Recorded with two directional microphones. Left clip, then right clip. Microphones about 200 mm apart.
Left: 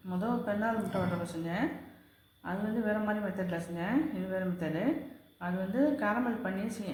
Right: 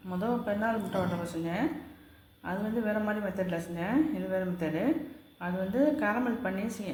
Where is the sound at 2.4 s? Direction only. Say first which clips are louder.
Right 1 dB; 20° right (ahead or behind).